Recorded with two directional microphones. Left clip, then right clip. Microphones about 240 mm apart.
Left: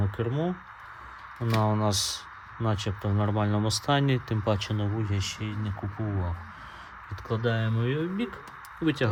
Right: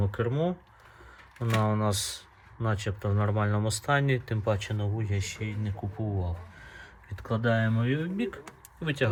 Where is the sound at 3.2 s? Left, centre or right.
Left.